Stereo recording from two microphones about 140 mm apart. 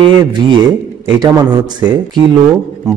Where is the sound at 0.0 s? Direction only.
35° right (ahead or behind).